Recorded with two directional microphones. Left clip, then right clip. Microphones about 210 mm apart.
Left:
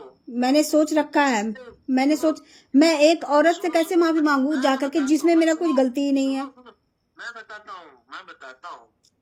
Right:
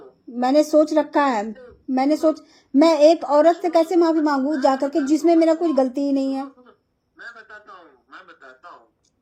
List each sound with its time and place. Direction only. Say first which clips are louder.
0.4 s a woman's voice: right 3 dB; 50° left (ahead or behind)
7.2 s a man's voice: left 3 dB; 15° left (ahead or behind)